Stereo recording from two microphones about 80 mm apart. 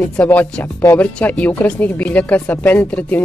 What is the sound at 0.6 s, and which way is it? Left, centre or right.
Speech, left.